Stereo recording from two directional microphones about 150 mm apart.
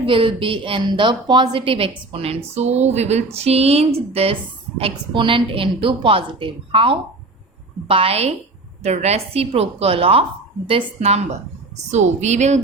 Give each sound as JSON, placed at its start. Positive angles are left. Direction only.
{"t": 0.0, "sound": "a woman's voice", "side_deg": -35}